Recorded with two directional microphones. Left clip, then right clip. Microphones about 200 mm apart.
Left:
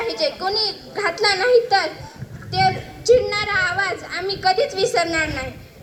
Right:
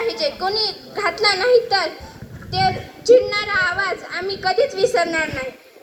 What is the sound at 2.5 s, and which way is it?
A woman's voice, 30° left (ahead or behind).